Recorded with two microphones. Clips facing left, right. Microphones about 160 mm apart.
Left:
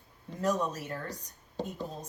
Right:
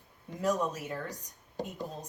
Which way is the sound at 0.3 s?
10° right (ahead or behind).